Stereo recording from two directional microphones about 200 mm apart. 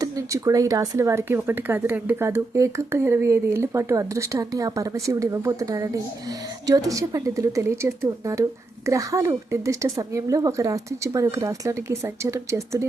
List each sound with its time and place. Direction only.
0.0 s speech: 15° right (ahead or behind)